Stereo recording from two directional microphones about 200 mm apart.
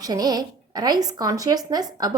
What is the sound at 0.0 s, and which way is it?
Speech, 20° right (ahead or behind).